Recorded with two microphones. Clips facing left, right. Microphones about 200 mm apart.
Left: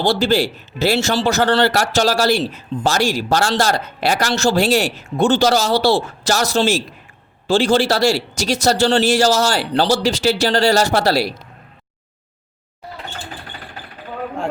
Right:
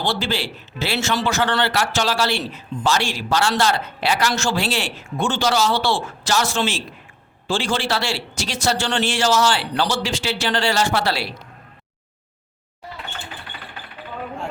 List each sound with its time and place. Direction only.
0.0 s speech: 40° left (ahead or behind)